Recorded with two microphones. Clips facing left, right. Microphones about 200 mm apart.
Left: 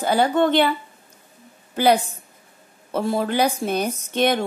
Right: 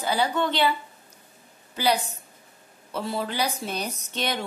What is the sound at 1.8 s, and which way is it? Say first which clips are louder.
A woman's voice: left 7 dB; 50° left (ahead or behind).